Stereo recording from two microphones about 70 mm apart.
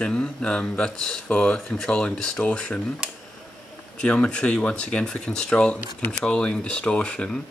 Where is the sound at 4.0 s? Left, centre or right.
Centre.